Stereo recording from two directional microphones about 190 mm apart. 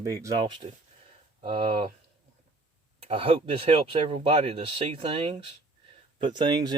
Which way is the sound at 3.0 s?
30° right (ahead or behind).